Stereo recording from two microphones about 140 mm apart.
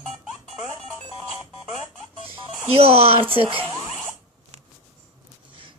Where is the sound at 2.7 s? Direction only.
45° right (ahead or behind).